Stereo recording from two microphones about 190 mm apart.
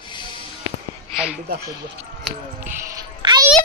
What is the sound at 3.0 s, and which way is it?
Music, 20° right (ahead or behind).